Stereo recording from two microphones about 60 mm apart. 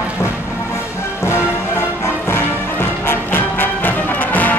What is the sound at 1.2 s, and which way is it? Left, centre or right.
Music, left.